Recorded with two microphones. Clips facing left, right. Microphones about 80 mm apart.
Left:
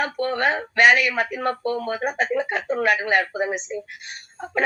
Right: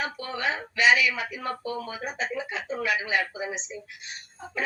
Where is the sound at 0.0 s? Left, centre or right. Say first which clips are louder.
Left 8 dB; left.